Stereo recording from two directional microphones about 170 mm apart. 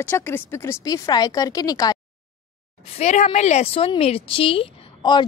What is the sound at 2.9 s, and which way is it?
A woman's voice, 40° left (ahead or behind).